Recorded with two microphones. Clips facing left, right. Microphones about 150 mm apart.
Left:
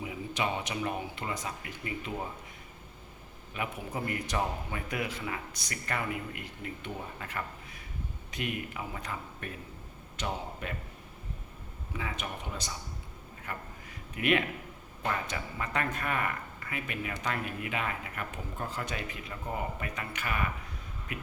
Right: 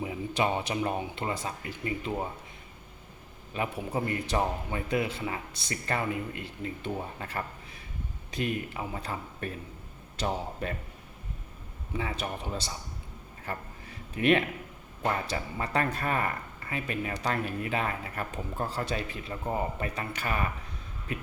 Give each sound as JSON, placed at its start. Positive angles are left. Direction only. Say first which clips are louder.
{"t": 0.0, "sound": "speech", "louder": "right 4 dB", "side_deg": -30}
{"t": 3.5, "sound": "a man's voice", "louder": "right 5 dB", "side_deg": -30}
{"t": 11.9, "sound": "speech", "louder": "right 4 dB", "side_deg": -30}